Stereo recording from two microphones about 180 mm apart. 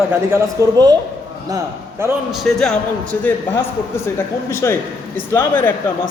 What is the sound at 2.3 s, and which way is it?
A man's voice, centre (ahead or behind).